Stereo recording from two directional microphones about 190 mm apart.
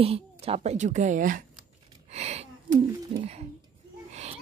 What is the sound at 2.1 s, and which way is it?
Speech, 35° right (ahead or behind).